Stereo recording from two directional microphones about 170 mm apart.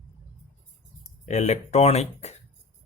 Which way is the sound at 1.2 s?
40° left (ahead or behind).